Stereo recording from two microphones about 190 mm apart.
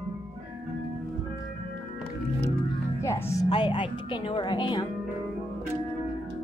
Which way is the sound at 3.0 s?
15° left (ahead or behind).